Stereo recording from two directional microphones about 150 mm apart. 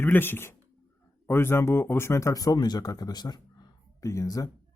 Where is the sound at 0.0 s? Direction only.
15° left (ahead or behind).